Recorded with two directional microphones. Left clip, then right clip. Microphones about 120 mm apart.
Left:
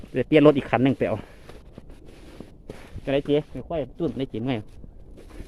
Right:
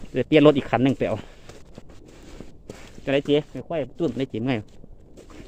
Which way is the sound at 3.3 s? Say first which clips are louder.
Right 2 dB; 25° right (ahead or behind).